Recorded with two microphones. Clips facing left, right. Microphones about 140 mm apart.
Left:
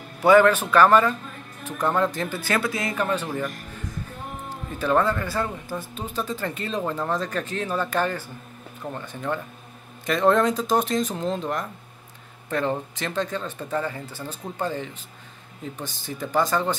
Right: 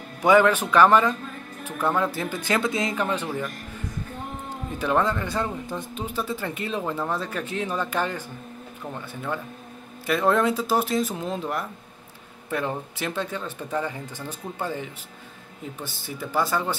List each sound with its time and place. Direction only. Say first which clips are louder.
0.2 s speech: left 2 dB; 15° right (ahead or behind)
1.7 s speech: even; 15° left (ahead or behind)
2.1 s speech: even; 15° right (ahead or behind)
4.7 s speech: left 2 dB; 15° right (ahead or behind)
14.0 s speech: even; 10° left (ahead or behind)
14.6 s speech: left 2 dB; 10° right (ahead or behind)
16.3 s speech: left 2 dB; 10° right (ahead or behind)